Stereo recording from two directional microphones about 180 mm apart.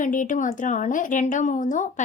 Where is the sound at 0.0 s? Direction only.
45° left (ahead or behind).